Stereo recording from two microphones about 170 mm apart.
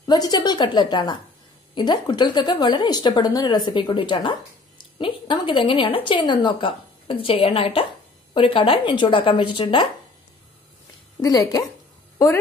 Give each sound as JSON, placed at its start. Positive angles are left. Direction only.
{"t": 0.0, "sound": "a woman's voice", "side_deg": 25}
{"t": 11.1, "sound": "a woman's voice", "side_deg": 20}